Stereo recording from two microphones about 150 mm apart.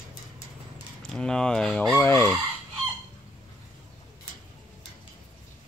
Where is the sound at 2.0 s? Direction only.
15° left (ahead or behind).